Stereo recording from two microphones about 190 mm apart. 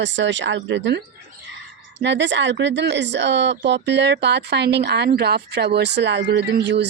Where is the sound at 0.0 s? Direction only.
70° right (ahead or behind).